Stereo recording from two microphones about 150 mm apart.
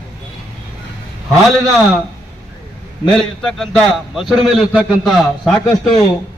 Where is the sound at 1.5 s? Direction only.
Centre (ahead or behind).